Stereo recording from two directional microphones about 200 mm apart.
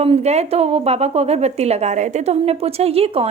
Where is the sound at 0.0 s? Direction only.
30° right (ahead or behind).